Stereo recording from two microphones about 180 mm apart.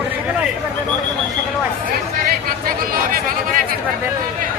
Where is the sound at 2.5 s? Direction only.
55° right (ahead or behind).